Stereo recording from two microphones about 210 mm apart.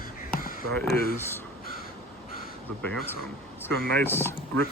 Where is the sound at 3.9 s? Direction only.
10° left (ahead or behind).